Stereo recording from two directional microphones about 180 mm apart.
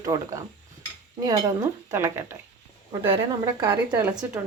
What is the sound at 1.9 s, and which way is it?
Dishes, 15° right (ahead or behind).